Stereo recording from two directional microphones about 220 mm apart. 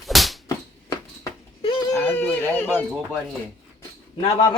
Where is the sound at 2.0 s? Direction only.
10° left (ahead or behind).